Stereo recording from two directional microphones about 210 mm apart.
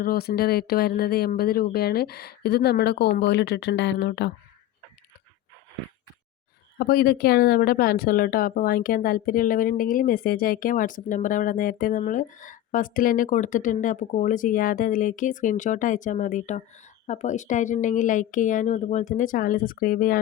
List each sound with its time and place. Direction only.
0.0 s speech: 45° left (ahead or behind)
6.7 s a woman's voice: 45° left (ahead or behind)